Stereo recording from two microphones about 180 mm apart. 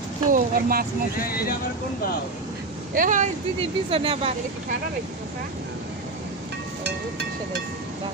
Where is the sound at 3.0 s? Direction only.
45° right (ahead or behind).